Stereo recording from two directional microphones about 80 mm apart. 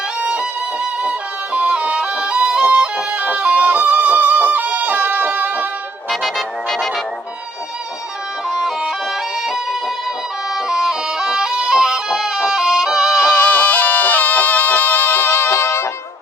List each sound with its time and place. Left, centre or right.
0.2 s music: centre
1.5 s music: centre
6.1 s music: centre
8.4 s music: centre
10.5 s music: centre
13.4 s music: left